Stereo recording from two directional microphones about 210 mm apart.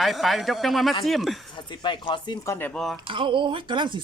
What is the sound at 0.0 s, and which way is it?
Speech, centre (ahead or behind).